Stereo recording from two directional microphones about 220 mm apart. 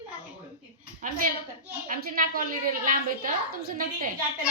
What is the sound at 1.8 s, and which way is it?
A woman's voice, 40° right (ahead or behind).